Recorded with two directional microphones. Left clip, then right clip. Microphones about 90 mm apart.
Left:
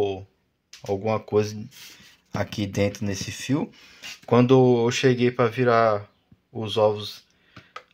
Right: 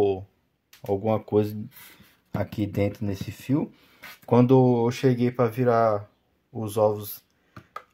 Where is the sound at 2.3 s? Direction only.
15° right (ahead or behind).